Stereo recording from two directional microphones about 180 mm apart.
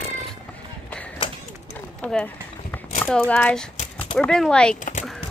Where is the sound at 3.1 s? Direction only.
5° left (ahead or behind).